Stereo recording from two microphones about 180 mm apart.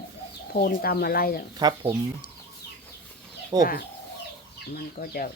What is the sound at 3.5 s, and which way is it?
Chicken, 20° right (ahead or behind).